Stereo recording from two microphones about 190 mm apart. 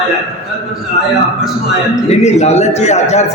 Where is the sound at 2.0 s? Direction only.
35° left (ahead or behind).